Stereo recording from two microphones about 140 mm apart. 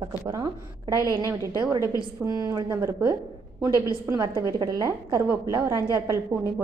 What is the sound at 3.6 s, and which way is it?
Speech, 25° left (ahead or behind).